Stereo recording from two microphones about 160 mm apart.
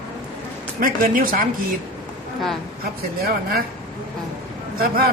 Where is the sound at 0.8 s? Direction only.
60° right (ahead or behind).